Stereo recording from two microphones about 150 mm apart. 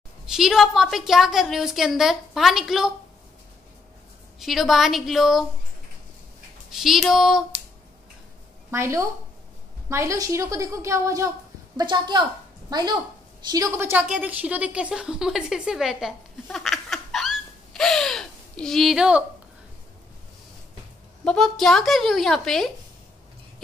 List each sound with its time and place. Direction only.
0.3 s a woman's voice: 5° right (ahead or behind)
4.4 s a woman's voice: centre (ahead or behind)
6.7 s a woman's voice: centre (ahead or behind)
8.6 s a woman's voice: 20° right (ahead or behind)
21.2 s a woman's voice: 5° left (ahead or behind)